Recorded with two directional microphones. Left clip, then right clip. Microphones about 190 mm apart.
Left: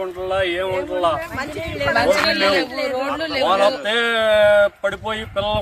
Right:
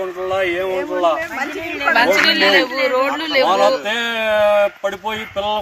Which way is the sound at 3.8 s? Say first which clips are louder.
Left 1 dB; 5° right (ahead or behind).